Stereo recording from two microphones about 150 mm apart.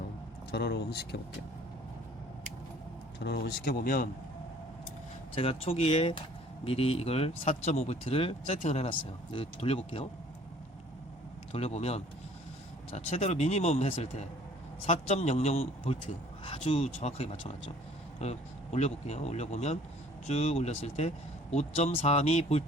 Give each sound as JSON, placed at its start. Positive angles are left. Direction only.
{"t": 0.5, "sound": "speech", "side_deg": 90}
{"t": 3.2, "sound": "speech", "side_deg": 90}
{"t": 5.3, "sound": "speech", "side_deg": 40}
{"t": 11.5, "sound": "speech", "side_deg": 45}